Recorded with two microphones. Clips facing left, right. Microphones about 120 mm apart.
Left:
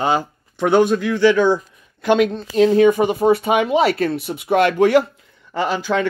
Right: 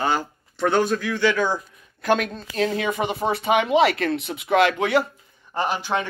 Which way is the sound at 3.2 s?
45° left (ahead or behind).